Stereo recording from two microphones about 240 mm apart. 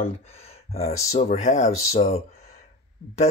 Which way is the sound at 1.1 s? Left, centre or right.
Left.